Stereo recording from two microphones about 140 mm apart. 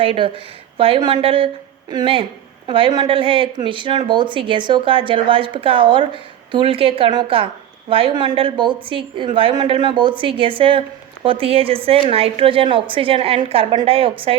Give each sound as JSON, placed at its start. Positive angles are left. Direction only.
{"t": 0.0, "sound": "a woman's voice", "side_deg": -40}